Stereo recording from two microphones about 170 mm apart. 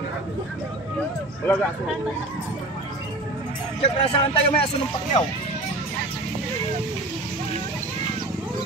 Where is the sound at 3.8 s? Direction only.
35° left (ahead or behind).